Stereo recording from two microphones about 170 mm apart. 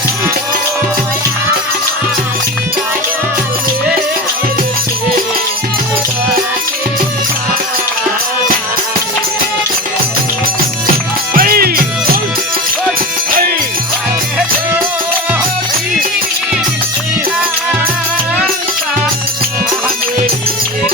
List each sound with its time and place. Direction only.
11.3 s music: 60° right (ahead or behind)